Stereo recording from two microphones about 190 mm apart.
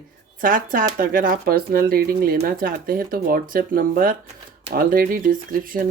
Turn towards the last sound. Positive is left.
turn(degrees=-50)  # may be behind; listen again after turning